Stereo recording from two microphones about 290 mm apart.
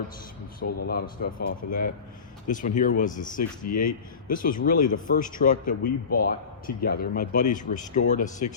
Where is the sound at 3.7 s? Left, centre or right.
Left.